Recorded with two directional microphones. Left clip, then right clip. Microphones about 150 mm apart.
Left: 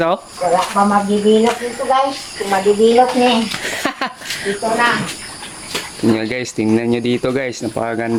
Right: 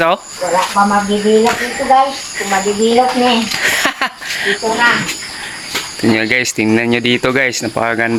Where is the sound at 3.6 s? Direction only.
5° left (ahead or behind).